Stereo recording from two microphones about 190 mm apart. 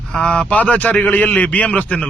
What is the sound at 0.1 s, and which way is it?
Speech, 5° left (ahead or behind).